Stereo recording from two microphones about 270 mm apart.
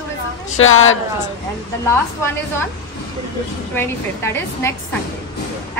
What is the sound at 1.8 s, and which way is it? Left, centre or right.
Speech, centre.